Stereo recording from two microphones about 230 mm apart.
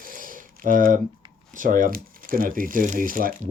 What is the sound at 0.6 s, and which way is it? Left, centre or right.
Speech, right.